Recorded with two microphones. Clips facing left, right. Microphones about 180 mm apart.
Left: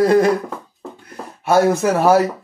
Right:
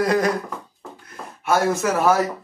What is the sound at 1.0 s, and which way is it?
Speech, 35° left (ahead or behind).